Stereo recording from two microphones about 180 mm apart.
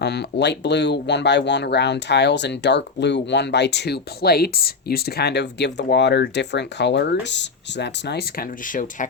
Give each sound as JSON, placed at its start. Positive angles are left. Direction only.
{"t": 0.0, "sound": "speech", "side_deg": 65}
{"t": 8.6, "sound": "speech", "side_deg": 45}